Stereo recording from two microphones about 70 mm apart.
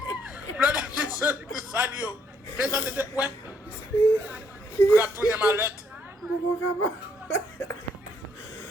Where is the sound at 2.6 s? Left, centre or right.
Right.